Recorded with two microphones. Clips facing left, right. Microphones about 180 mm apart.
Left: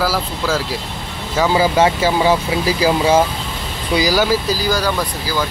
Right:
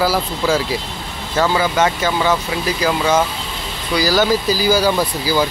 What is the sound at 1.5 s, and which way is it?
Speech, 30° left (ahead or behind).